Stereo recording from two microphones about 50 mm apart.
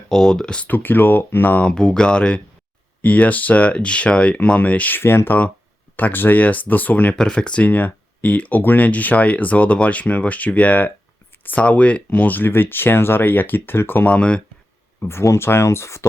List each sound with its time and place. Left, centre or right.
0.1 s speech: centre
0.6 s speech: left
1.6 s speech: centre
3.0 s speech: left
4.9 s speech: left
6.4 s speech: left
7.2 s speech: centre; by 12.5 s left
12.5 s speech: left
14.1 s speech: left
15.0 s speech: left
15.4 s speech: left